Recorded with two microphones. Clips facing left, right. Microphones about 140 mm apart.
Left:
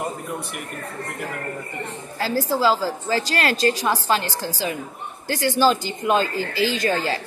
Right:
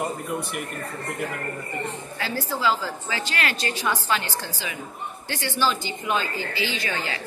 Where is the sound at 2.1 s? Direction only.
35° left (ahead or behind).